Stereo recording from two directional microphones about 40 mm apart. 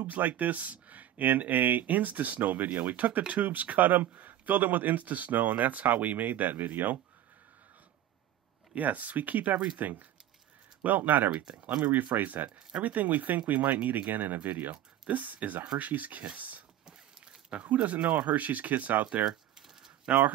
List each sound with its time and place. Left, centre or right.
0.0 s speech: right
8.7 s speech: right
11.6 s speech: right
11.9 s speech: right
16.3 s a sound: right
17.5 s speech: right
20.1 s speech: right